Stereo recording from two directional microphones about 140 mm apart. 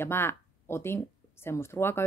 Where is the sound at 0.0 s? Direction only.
15° left (ahead or behind).